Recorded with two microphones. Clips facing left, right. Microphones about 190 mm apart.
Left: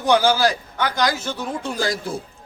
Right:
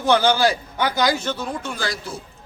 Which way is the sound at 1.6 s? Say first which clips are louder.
Left 4 dB; 40° left (ahead or behind).